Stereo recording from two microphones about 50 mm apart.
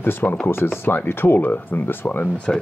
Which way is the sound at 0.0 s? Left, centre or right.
Left.